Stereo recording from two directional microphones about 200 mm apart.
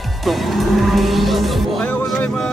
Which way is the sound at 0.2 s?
Centre (ahead or behind).